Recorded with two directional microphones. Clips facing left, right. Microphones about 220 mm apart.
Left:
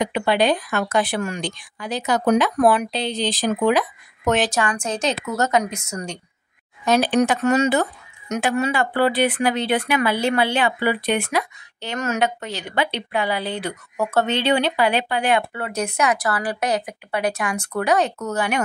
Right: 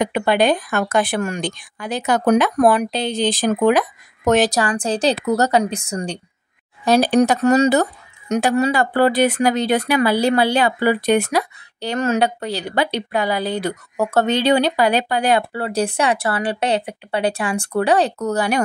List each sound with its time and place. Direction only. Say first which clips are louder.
0.0 s speech: right 2 dB; 50° right (ahead or behind)